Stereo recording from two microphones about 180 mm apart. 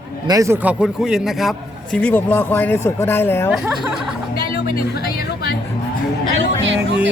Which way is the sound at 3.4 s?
5° right (ahead or behind).